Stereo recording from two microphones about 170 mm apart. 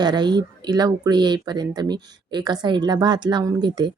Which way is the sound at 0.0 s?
25° right (ahead or behind).